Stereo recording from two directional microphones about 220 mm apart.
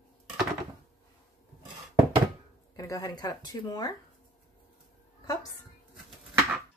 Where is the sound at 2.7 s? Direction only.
15° left (ahead or behind).